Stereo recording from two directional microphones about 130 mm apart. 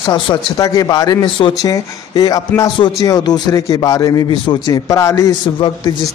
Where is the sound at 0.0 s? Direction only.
35° left (ahead or behind).